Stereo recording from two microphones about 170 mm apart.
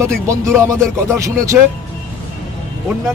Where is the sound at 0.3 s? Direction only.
15° right (ahead or behind).